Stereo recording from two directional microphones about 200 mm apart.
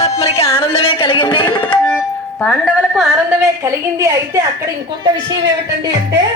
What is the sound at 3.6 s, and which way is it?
Speech, 15° right (ahead or behind).